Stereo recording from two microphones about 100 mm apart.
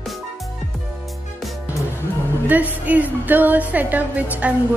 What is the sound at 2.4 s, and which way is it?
A woman's voice, 15° right (ahead or behind).